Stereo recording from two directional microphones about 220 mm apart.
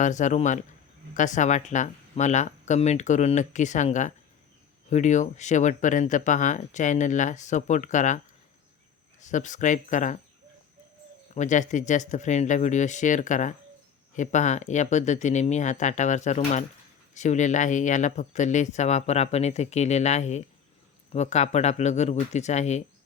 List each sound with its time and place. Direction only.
0.0 s speech: 35° left (ahead or behind)
9.2 s speech: 35° left (ahead or behind)
11.3 s speech: 35° left (ahead or behind)